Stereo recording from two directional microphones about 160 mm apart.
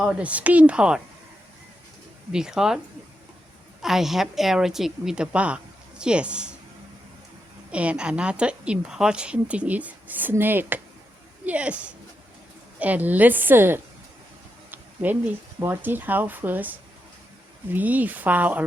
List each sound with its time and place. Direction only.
0.0 s a woman's voice: 5° right (ahead or behind)
2.3 s a woman's voice: 5° right (ahead or behind)
7.7 s a woman's voice: 10° right (ahead or behind)
14.7 s a sound: 10° right (ahead or behind)
15.6 s a woman's voice: 15° right (ahead or behind)